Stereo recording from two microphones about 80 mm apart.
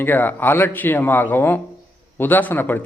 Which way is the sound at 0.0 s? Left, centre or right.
Left.